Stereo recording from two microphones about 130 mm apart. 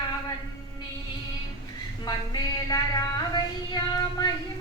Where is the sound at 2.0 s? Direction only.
30° left (ahead or behind).